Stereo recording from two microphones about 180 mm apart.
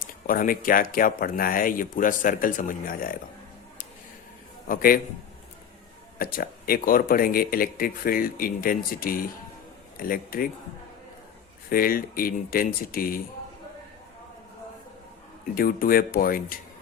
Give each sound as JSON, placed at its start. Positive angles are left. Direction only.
{"t": 0.0, "sound": "speech", "side_deg": 50}
{"t": 4.7, "sound": "speech", "side_deg": 50}
{"t": 6.1, "sound": "speech", "side_deg": 55}
{"t": 11.7, "sound": "speech", "side_deg": 55}
{"t": 15.5, "sound": "speech", "side_deg": 55}